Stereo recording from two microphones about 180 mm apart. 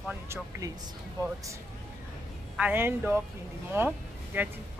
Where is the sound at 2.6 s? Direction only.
10° right (ahead or behind).